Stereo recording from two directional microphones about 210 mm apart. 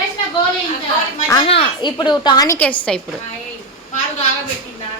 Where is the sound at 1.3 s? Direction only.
25° left (ahead or behind); by 3.0 s 5° left (ahead or behind).